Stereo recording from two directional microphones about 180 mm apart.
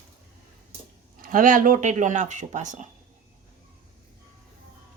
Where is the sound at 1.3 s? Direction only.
50° right (ahead or behind).